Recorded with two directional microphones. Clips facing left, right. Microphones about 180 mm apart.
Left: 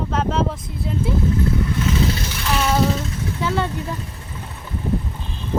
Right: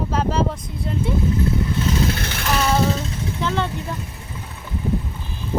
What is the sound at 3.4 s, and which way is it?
Speech, 10° left (ahead or behind).